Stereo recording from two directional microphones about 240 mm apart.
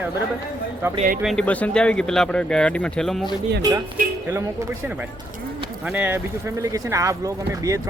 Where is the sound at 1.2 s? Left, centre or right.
Centre.